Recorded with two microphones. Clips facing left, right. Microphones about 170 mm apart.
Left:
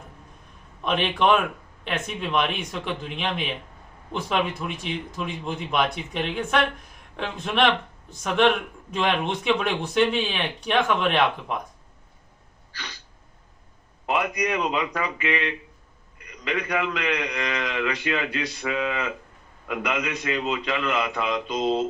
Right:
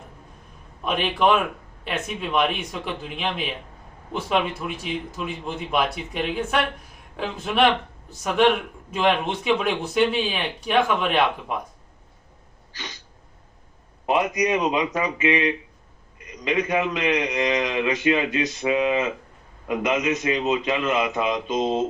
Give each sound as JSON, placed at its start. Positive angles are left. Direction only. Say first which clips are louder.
{"t": 0.9, "sound": "speech", "louder": "right 1 dB", "side_deg": -5}
{"t": 12.7, "sound": "a sound", "louder": "right 2 dB", "side_deg": -20}
{"t": 14.1, "sound": "a man's voice", "louder": "right 4 dB", "side_deg": -20}